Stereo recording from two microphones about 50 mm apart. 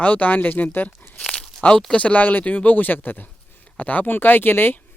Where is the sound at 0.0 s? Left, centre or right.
Left.